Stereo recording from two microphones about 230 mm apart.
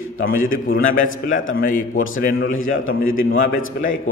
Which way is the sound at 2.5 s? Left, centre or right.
Left.